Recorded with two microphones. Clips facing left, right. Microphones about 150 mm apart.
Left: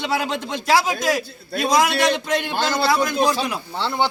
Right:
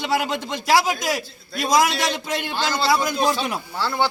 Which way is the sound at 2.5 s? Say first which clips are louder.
Left 2 dB; 55° left (ahead or behind).